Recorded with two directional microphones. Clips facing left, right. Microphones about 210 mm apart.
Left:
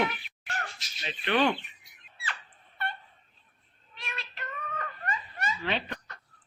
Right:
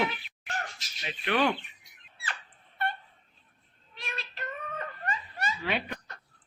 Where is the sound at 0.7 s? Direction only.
5° right (ahead or behind).